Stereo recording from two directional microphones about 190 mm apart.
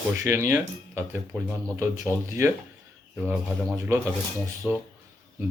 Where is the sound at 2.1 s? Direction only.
10° left (ahead or behind).